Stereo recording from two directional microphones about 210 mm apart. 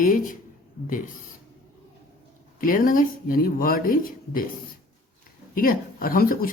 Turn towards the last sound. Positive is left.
turn(degrees=45)  # may be behind; listen again after turning